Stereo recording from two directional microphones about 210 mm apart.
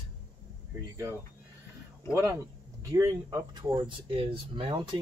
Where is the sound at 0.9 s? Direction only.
15° right (ahead or behind).